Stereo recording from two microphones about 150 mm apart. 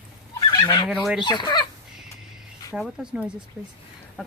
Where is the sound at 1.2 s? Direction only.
30° left (ahead or behind).